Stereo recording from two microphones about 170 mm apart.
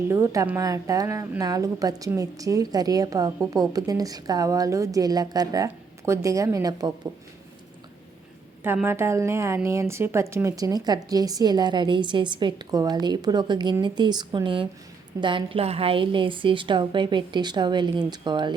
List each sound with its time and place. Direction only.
0.1 s a woman's voice: 15° right (ahead or behind)
8.6 s a woman's voice: 15° right (ahead or behind)